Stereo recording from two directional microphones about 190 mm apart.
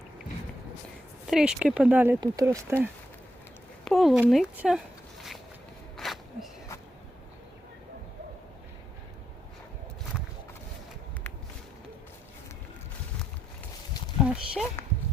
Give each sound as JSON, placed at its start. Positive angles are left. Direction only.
{"t": 1.3, "sound": "speech", "side_deg": -5}
{"t": 3.8, "sound": "speech", "side_deg": 0}
{"t": 6.0, "sound": "a sound", "side_deg": 0}
{"t": 14.2, "sound": "horse", "side_deg": -5}